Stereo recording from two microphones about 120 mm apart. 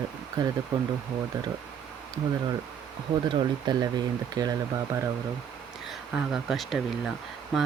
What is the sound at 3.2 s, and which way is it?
Speech, 35° right (ahead or behind).